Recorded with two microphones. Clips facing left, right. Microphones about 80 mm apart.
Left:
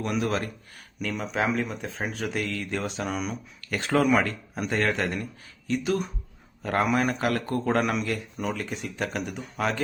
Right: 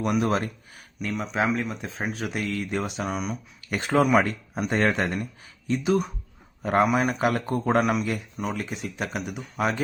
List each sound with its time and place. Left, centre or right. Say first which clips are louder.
0.0 s speech: right 3 dB; right
0.9 s speech: right 1 dB; centre
3.7 s speech: right 2 dB; right
7.8 s speech: right 2 dB; centre